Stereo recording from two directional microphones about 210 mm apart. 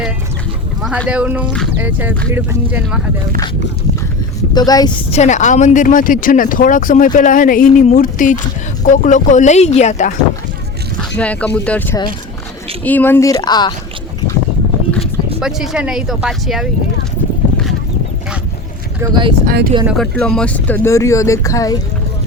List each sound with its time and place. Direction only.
0.8 s speech: 5° right (ahead or behind)
4.5 s speech: 20° left (ahead or behind)
5.1 s speech: 35° left (ahead or behind)
11.2 s speech: 5° left (ahead or behind)
15.4 s speech: centre (ahead or behind)
18.9 s speech: 20° right (ahead or behind)
19.5 s speech: 45° right (ahead or behind)
19.8 s speech: centre (ahead or behind); by 21.8 s 15° left (ahead or behind)